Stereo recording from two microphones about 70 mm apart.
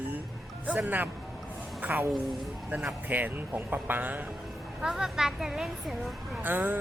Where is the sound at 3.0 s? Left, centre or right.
Right.